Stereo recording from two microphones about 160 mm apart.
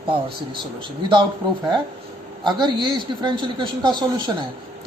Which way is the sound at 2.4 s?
25° right (ahead or behind).